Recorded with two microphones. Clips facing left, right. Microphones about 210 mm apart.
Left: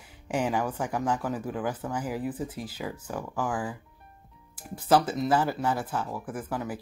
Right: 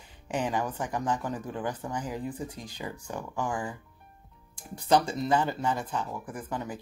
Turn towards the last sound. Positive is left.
turn(degrees=5)  # may be behind; listen again after turning